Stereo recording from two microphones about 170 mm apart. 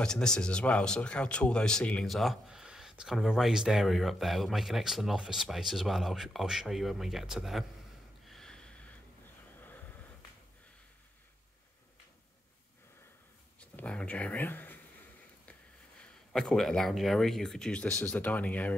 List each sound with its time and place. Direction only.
0.0 s speech: 5° left (ahead or behind)
8.3 s snort: 5° left (ahead or behind)
9.6 s a sound: 10° left (ahead or behind)
13.6 s speech: 5° left (ahead or behind)
16.3 s speech: centre (ahead or behind)